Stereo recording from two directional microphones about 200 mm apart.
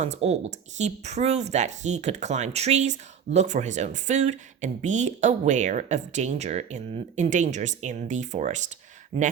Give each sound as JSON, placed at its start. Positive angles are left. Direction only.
{"t": 0.0, "sound": "speech", "side_deg": -35}